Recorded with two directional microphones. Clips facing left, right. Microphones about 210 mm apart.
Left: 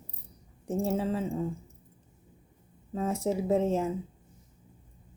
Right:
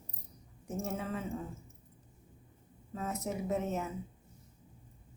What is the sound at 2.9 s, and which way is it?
Speech, 30° left (ahead or behind).